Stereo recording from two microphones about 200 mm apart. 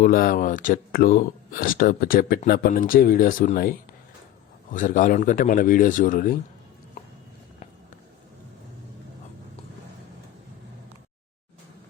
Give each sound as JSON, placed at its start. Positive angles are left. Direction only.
{"t": 0.0, "sound": "a man's voice", "side_deg": 45}